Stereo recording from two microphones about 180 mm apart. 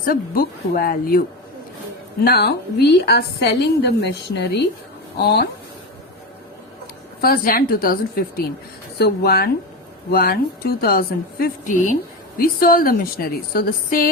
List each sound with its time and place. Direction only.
0.0 s a woman's voice: 55° left (ahead or behind)
2.2 s a woman's voice: 60° left (ahead or behind)
7.2 s a woman's voice: 55° left (ahead or behind)